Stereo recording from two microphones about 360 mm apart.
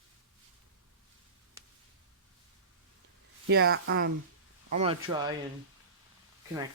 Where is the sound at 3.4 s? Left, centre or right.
Right.